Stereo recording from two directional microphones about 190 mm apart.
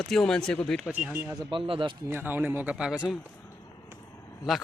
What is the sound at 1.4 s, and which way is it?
Speech, 25° right (ahead or behind).